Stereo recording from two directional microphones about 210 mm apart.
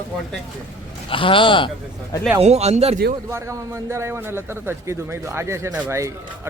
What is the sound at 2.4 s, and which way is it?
Speech, 30° right (ahead or behind).